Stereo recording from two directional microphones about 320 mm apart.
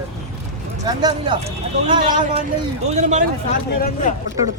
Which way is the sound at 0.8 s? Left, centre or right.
Centre.